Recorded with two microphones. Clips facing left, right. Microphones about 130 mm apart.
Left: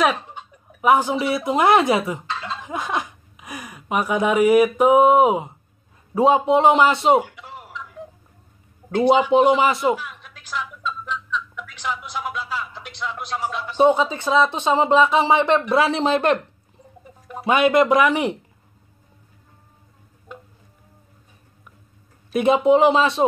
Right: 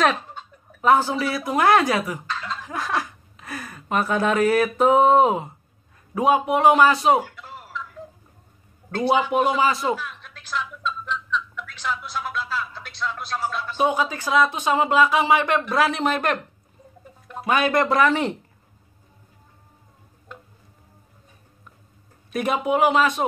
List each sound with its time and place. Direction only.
0.0 s speech: 15° left (ahead or behind)
6.1 s speech: 30° left (ahead or behind)
8.9 s speech: 15° left (ahead or behind)
9.9 s a sound: 10° left (ahead or behind)
13.8 s speech: 25° left (ahead or behind)
17.5 s speech: 20° left (ahead or behind)
22.3 s speech: 25° left (ahead or behind)